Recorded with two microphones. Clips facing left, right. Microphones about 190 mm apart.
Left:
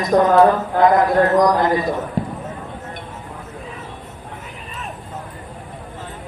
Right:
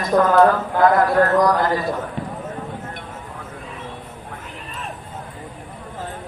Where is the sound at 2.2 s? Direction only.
40° left (ahead or behind).